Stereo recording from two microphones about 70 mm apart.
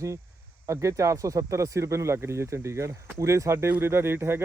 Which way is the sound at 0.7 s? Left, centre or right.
Right.